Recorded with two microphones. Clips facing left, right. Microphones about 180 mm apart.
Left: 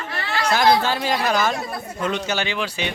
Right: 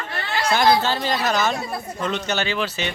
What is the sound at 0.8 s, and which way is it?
A man's voice, 10° left (ahead or behind).